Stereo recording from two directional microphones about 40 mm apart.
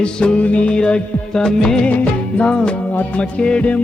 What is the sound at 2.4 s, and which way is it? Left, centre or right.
Music, left.